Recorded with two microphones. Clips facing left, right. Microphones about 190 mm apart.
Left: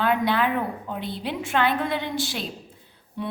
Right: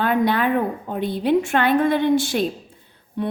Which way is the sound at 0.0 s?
50° right (ahead or behind).